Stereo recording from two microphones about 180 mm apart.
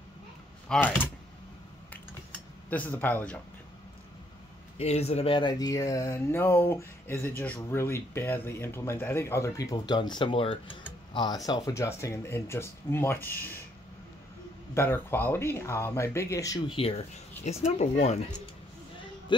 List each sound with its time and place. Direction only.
0.7 s speech: 10° left (ahead or behind)
2.7 s speech: 10° left (ahead or behind)
4.7 s speech: 35° left (ahead or behind); by 13.6 s 10° left (ahead or behind)
14.7 s speech: 15° left (ahead or behind); by 18.2 s 40° left (ahead or behind)